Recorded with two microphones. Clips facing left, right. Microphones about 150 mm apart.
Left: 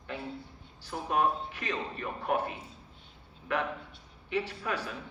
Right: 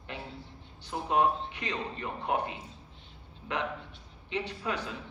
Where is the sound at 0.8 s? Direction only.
20° right (ahead or behind).